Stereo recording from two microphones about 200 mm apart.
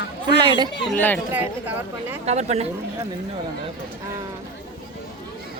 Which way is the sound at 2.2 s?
35° right (ahead or behind).